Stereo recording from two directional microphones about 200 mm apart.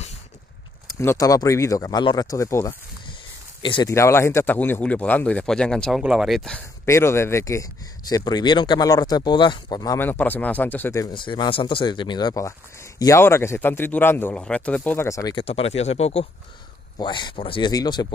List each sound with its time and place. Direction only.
0.8 s speech: 15° left (ahead or behind)
3.9 s speech: 15° left (ahead or behind)
6.9 s speech: 15° left (ahead or behind)
11.1 s speech: 25° left (ahead or behind)
15.4 s speech: 30° left (ahead or behind)